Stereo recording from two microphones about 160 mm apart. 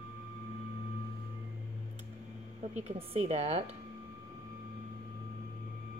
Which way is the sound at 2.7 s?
40° right (ahead or behind).